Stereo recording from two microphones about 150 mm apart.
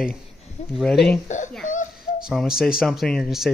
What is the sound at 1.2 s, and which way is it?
Speech, 55° left (ahead or behind).